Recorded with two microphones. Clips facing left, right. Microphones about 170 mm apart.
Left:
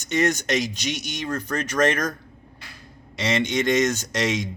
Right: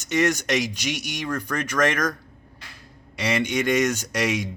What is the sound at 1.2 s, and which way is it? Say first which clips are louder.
Speech: even; 25° left (ahead or behind).